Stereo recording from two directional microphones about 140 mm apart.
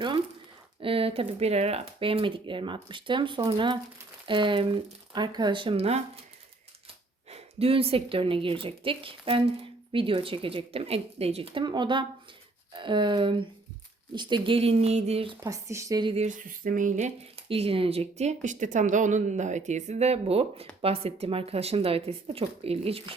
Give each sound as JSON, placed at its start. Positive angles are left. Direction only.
{"t": 0.8, "sound": "speech", "side_deg": -40}
{"t": 7.3, "sound": "speech", "side_deg": -45}
{"t": 15.4, "sound": "speech", "side_deg": -25}
{"t": 16.0, "sound": "speech", "side_deg": -50}